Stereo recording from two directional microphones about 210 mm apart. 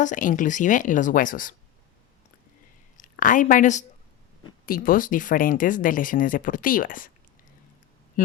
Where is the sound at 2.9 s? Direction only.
40° left (ahead or behind).